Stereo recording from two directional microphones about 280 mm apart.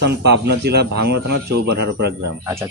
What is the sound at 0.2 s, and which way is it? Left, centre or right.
Speech, right.